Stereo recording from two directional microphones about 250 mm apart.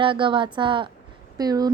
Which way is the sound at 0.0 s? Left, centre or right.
Centre.